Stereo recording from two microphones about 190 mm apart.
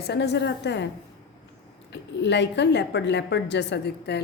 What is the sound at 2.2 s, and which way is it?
A woman's voice, 65° left (ahead or behind).